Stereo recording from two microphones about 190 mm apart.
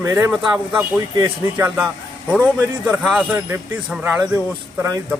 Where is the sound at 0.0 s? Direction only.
15° right (ahead or behind).